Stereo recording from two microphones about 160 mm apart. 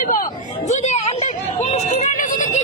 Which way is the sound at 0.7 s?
45° left (ahead or behind).